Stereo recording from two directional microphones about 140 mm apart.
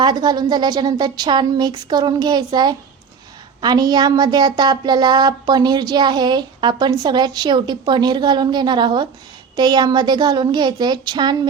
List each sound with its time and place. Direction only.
0.0 s speech: 30° right (ahead or behind)